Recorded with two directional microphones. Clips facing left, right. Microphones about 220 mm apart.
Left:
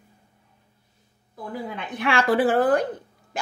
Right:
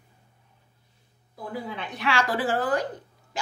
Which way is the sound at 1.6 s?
50° left (ahead or behind).